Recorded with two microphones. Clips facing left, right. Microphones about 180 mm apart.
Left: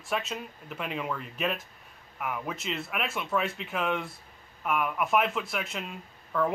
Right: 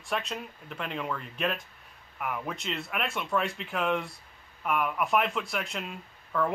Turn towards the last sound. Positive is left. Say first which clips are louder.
# left 1 dB
turn(degrees=0)  # may be behind; listen again after turning